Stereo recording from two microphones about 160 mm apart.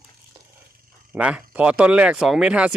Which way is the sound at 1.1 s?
10° right (ahead or behind).